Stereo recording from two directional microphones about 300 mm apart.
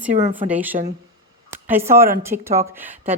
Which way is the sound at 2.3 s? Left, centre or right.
Right.